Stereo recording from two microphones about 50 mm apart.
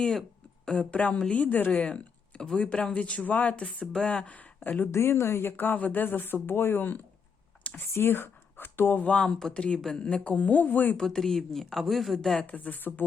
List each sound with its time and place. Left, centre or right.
0.0 s a sound: centre
0.8 s speech: left
2.4 s speech: centre
4.6 s a man's voice: left
4.9 s speech: left
9.0 s speech: left
10.2 s a man's voice: left
10.9 s speech: centre
12.5 s a man's voice: left